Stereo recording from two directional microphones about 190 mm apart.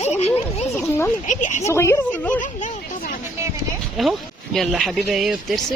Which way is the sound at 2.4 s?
40° left (ahead or behind).